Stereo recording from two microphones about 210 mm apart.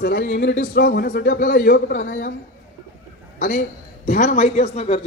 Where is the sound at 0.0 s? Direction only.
45° left (ahead or behind).